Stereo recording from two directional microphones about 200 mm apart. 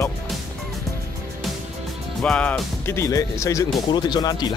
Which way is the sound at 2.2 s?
5° left (ahead or behind).